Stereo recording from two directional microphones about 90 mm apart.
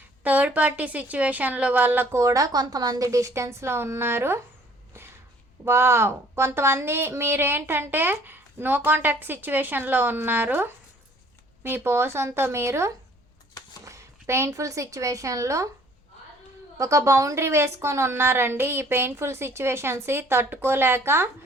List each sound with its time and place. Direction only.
0.2 s a woman's voice: 20° right (ahead or behind)
2.1 s a woman's voice: 40° right (ahead or behind)
5.6 s a woman's voice: 30° right (ahead or behind)
16.7 s a woman's voice: 35° right (ahead or behind)